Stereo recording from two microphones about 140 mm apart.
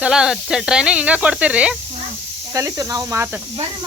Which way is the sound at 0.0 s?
5° right (ahead or behind).